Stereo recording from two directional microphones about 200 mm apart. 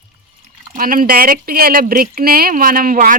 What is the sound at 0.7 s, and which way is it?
Speech, 45° right (ahead or behind).